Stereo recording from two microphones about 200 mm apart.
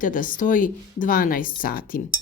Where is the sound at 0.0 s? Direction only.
45° left (ahead or behind).